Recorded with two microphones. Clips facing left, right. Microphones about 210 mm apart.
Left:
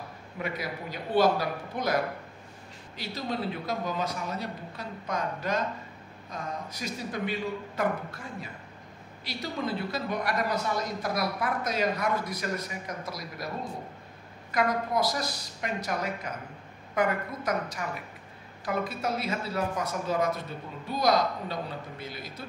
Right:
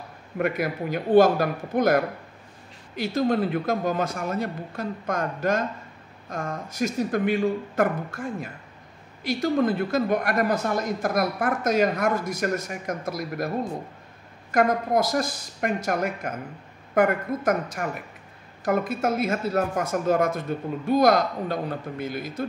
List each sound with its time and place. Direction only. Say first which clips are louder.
0.4 s speech: right 9 dB; 55° right (ahead or behind)
3.0 s speech: right 10 dB; 50° right (ahead or behind)
14.5 s speech: right 6 dB; 50° right (ahead or behind)